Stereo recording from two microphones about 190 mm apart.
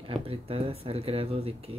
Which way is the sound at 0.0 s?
30° right (ahead or behind).